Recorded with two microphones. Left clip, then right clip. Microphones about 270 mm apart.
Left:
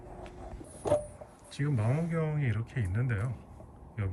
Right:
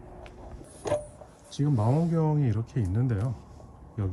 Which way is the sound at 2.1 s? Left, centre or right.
Centre.